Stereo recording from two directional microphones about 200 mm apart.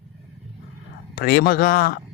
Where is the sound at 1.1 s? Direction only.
50° left (ahead or behind).